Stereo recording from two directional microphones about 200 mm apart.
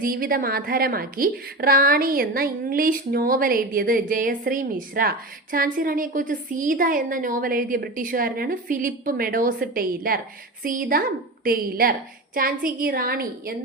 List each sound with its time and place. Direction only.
0.0 s a woman's voice: 45° right (ahead or behind)